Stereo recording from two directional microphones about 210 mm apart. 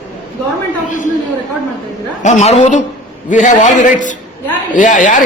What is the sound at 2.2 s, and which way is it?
A man's voice, 35° left (ahead or behind).